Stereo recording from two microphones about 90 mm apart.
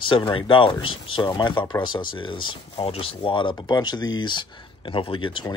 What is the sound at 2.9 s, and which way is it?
Speech, 90° left.